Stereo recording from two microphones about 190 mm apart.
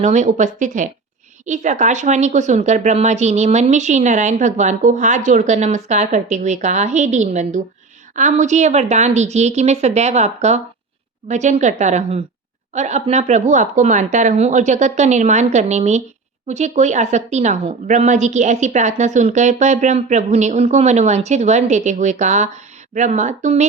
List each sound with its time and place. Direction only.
0.0 s speech: 40° right (ahead or behind)